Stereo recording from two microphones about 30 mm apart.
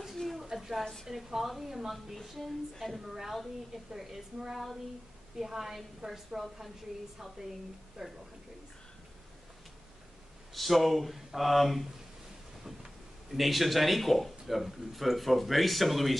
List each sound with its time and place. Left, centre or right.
0.2 s a sound: centre
0.6 s a woman's voice: centre
2.8 s a woman's voice: centre
8.0 s a woman's voice: centre
10.5 s speech: centre
12.6 s speech: centre